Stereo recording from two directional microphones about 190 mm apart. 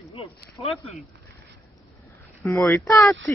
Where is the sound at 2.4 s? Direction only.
15° left (ahead or behind).